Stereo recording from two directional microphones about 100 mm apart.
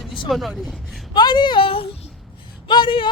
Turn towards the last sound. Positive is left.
turn(degrees=55)  # may be behind; listen again after turning